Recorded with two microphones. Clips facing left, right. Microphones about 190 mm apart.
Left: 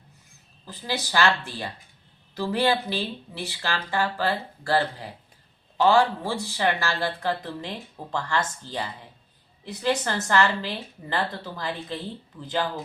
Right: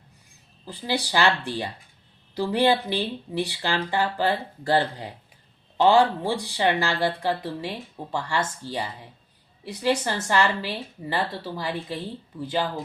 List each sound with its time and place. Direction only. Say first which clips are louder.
0.6 s speech: right 3 dB; 15° right (ahead or behind)